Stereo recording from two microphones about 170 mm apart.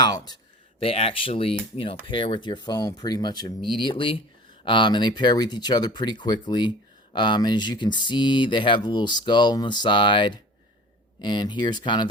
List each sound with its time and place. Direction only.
0.0 s speech: 25° left (ahead or behind)
0.8 s speech: 35° left (ahead or behind)